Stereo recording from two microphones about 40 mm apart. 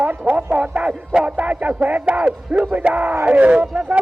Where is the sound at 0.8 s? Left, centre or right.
Right.